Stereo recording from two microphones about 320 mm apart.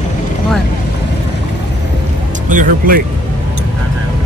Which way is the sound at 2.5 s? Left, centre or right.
Right.